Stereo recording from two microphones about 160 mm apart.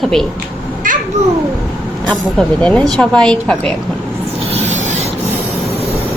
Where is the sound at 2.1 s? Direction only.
5° left (ahead or behind).